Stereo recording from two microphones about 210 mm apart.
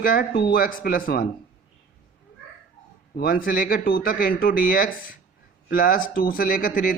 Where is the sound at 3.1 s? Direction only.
45° left (ahead or behind).